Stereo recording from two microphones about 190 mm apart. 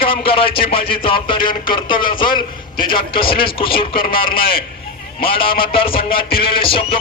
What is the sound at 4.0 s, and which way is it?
Speech, 50° left (ahead or behind).